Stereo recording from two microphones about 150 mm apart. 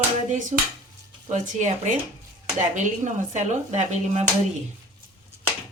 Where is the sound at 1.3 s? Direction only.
50° right (ahead or behind).